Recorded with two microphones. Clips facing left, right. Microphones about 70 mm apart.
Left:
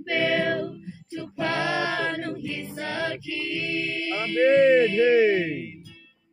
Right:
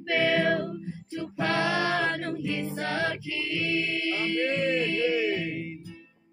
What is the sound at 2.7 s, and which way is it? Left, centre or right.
Music, centre.